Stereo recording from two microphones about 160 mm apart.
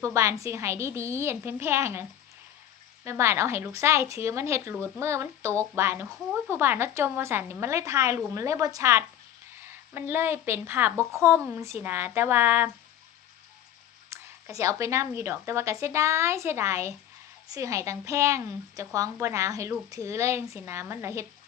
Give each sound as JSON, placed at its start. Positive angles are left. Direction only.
{"t": 0.0, "sound": "a woman's voice", "side_deg": -20}
{"t": 14.0, "sound": "a woman's voice", "side_deg": -20}